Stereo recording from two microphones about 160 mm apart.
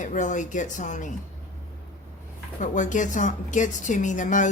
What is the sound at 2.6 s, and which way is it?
A woman's voice, 50° left (ahead or behind).